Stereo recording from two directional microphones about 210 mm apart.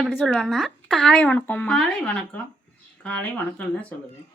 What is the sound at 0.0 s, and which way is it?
A woman's voice, centre (ahead or behind).